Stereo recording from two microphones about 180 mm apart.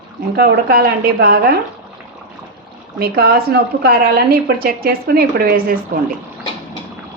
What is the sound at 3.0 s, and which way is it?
Speech, 60° right (ahead or behind).